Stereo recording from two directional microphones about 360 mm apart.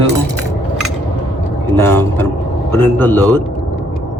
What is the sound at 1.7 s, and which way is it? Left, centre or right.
Speech, centre.